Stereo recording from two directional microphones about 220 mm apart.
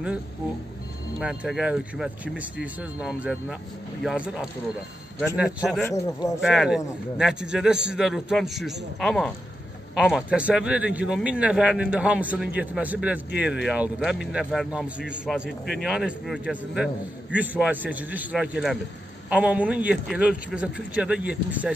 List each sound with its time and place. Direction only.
1.2 s speech: 5° right (ahead or behind)
5.9 s speech: 15° left (ahead or behind)
6.4 s speech: centre (ahead or behind)